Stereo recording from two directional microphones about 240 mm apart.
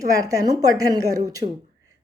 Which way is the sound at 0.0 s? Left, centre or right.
Centre.